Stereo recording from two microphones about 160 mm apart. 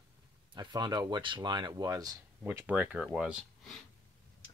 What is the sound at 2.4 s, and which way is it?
Speech, 10° right (ahead or behind).